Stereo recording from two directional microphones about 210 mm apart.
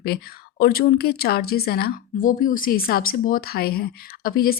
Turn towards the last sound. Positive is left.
turn(degrees=45)  # may be behind; listen again after turning